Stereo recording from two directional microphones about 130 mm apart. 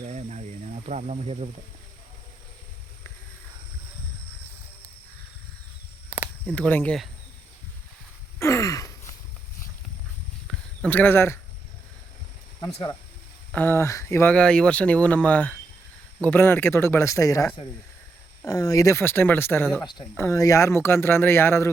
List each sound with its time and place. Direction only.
0.0 s speech: 60° right (ahead or behind)
6.4 s speech: 10° left (ahead or behind)
8.4 s sigh: 20° left (ahead or behind)
10.5 s a sound: 5° left (ahead or behind)
10.8 s speech: 15° left (ahead or behind)
12.5 s speech: 30° left (ahead or behind)
13.5 s speech: 15° left (ahead or behind)
14.3 s speech: 5° left (ahead or behind)
19.8 s speech: 35° left (ahead or behind)
20.1 s speech: 20° left (ahead or behind)